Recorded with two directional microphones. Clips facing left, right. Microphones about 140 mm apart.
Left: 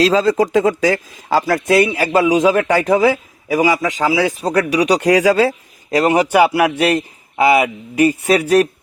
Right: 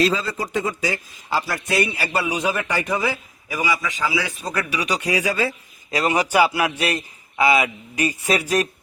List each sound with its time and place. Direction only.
0.0 s a man's voice: 90° left
5.9 s speech: 55° left (ahead or behind)